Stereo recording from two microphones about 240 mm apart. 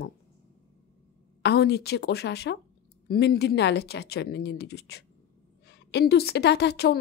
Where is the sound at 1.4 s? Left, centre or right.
Left.